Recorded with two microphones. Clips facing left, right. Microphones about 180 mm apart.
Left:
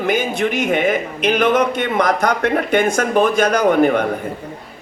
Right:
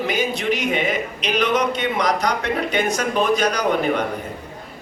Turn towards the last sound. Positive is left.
turn(degrees=50)  # may be behind; listen again after turning